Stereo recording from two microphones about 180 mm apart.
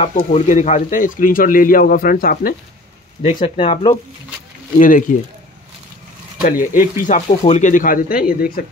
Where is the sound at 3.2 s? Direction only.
30° left (ahead or behind).